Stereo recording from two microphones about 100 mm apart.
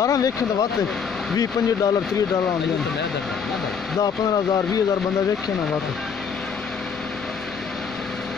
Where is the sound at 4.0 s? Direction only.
40° left (ahead or behind).